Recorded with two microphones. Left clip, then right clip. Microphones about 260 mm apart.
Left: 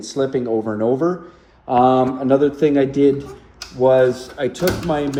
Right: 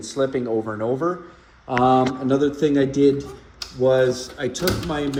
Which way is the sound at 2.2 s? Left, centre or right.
Centre.